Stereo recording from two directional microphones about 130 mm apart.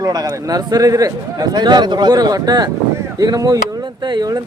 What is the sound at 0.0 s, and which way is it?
A man's voice, 30° right (ahead or behind).